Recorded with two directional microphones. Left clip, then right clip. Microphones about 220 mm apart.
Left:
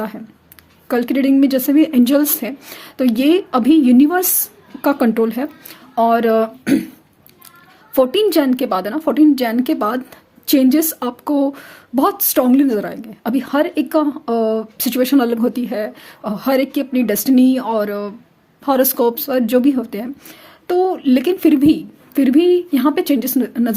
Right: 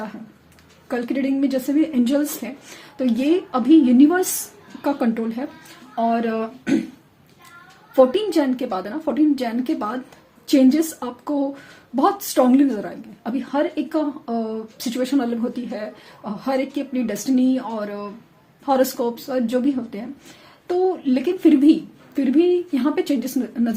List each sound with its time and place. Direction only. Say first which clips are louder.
0.9 s speech: left 7 dB; 50° left (ahead or behind)
7.9 s speech: left 3 dB; 50° left (ahead or behind)